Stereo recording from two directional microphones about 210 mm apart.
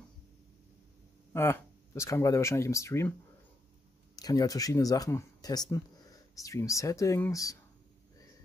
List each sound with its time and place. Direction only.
1.3 s speech: 10° left (ahead or behind)